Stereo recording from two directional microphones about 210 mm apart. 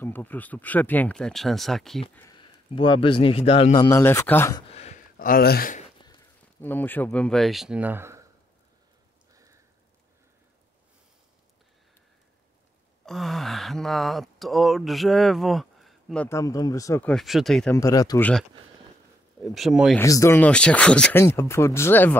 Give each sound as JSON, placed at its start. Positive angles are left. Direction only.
{"t": 0.0, "sound": "speech", "side_deg": 10}
{"t": 2.2, "sound": "a man's voice", "side_deg": 20}
{"t": 4.6, "sound": "a sound", "side_deg": 30}
{"t": 5.1, "sound": "speech", "side_deg": 45}
{"t": 6.6, "sound": "speech", "side_deg": 10}
{"t": 9.3, "sound": "a sound", "side_deg": -15}
{"t": 13.0, "sound": "speech", "side_deg": 0}
{"t": 17.1, "sound": "speech", "side_deg": 0}
{"t": 17.7, "sound": "speech", "side_deg": 15}
{"t": 19.4, "sound": "speech", "side_deg": 0}
{"t": 20.0, "sound": "speech", "side_deg": 15}